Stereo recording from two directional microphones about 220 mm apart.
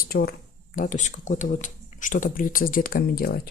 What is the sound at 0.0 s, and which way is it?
Speech, 45° left (ahead or behind).